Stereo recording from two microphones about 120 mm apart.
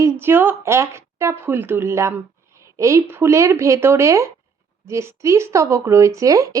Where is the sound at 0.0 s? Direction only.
20° right (ahead or behind).